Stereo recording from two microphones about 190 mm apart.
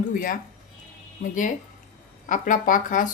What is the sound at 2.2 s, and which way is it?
Speech, 45° left (ahead or behind).